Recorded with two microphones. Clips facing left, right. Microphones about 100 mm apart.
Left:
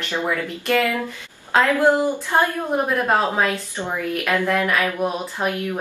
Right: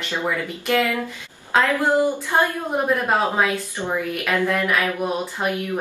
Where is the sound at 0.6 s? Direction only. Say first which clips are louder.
Left 1 dB; 15° right (ahead or behind).